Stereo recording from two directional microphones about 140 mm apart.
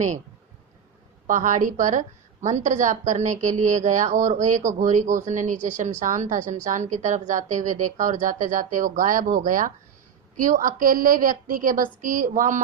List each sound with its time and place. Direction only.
1.3 s a woman's voice: 65° right (ahead or behind)